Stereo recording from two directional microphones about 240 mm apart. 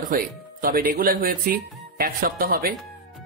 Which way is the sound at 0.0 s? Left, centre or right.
Right.